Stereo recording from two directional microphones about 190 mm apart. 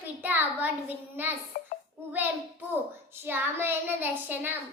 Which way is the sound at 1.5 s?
45° left (ahead or behind).